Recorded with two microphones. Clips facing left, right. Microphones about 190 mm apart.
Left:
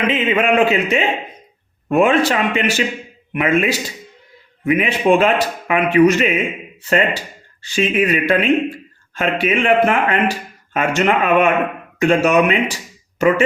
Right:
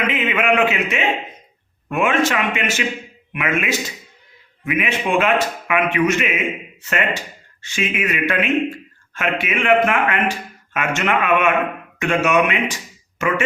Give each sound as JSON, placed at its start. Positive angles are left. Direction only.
{"t": 0.1, "sound": "a man's voice", "side_deg": 30}